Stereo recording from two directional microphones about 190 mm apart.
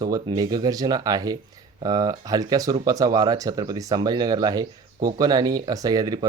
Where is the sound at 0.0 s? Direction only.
20° right (ahead or behind).